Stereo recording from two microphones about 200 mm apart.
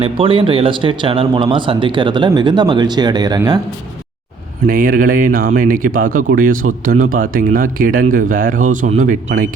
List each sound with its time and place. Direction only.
0.0 s speech: 25° right (ahead or behind)
4.6 s speech: 45° right (ahead or behind)